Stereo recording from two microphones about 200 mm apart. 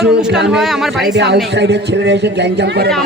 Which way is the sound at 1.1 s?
60° right (ahead or behind).